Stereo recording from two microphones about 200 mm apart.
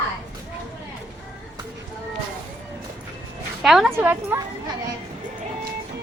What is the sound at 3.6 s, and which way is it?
Speech, centre (ahead or behind).